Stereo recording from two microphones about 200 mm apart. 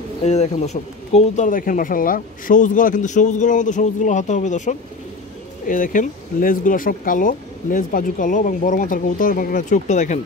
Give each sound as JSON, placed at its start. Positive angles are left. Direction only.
{"t": 0.2, "sound": "speech", "side_deg": 35}